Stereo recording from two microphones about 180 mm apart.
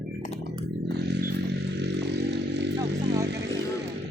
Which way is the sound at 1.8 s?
70° right (ahead or behind).